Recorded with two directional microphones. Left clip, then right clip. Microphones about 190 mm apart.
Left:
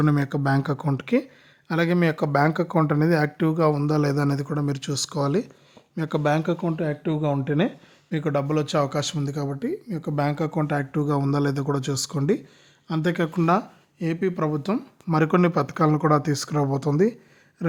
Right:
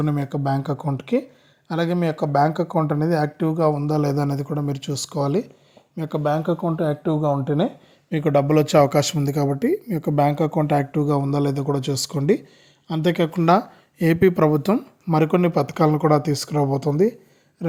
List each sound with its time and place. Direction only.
0.0 s speech: 5° left (ahead or behind)
8.1 s speech: 15° right (ahead or behind)
14.0 s speech: 30° right (ahead or behind)
15.0 s speech: 5° right (ahead or behind)